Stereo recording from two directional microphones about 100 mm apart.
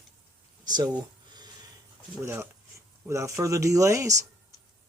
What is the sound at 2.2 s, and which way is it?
Speech, 25° right (ahead or behind).